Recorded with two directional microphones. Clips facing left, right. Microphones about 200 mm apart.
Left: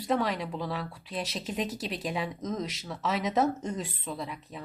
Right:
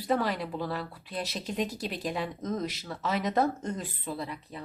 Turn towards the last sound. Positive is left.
turn(degrees=0)  # may be behind; listen again after turning